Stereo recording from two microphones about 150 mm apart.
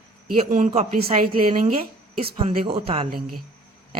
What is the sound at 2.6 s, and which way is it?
Speech, 40° right (ahead or behind).